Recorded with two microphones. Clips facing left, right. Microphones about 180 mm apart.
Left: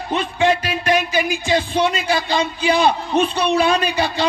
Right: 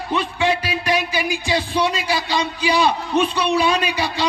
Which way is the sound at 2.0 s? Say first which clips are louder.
Left 2 dB; 55° left (ahead or behind).